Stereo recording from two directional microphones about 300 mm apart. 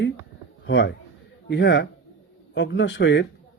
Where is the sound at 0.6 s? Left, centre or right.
Left.